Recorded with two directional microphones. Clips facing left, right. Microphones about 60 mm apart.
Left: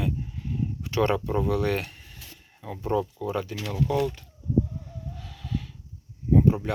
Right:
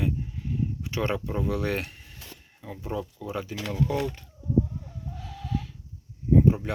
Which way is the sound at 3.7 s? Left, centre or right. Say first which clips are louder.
Left 1 dB; right.